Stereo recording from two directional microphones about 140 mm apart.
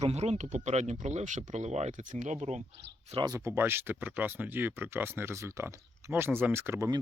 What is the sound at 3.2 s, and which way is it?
Speech, 20° right (ahead or behind).